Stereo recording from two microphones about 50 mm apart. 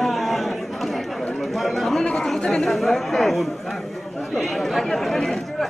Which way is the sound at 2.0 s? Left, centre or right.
Centre.